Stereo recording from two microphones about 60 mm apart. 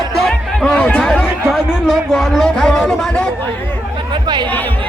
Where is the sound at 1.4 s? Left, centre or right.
Centre.